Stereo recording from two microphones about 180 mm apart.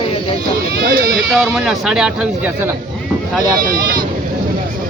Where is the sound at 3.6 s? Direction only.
50° right (ahead or behind).